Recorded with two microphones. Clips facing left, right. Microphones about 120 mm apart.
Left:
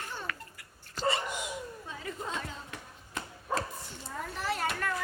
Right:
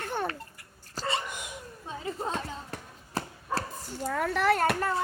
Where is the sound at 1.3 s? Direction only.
50° right (ahead or behind).